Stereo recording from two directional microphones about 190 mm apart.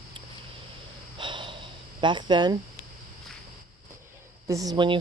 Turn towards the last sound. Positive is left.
turn(degrees=-25)  # may be behind; listen again after turning